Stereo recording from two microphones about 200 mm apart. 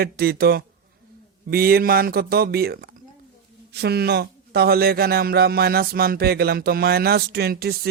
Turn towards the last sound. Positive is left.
turn(degrees=-50)  # may be behind; listen again after turning